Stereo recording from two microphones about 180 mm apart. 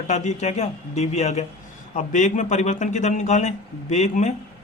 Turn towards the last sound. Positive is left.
turn(degrees=40)  # may be behind; listen again after turning